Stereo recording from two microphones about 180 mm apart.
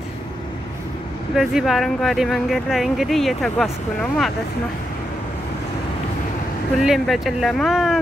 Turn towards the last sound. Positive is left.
turn(degrees=0)  # may be behind; listen again after turning